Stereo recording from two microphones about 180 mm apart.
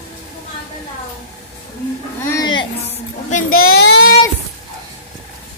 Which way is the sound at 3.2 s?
45° left (ahead or behind).